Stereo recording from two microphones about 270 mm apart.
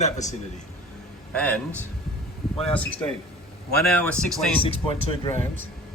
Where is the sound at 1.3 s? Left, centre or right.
Centre.